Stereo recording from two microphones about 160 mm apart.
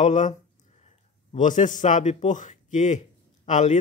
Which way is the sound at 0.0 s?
50° left (ahead or behind).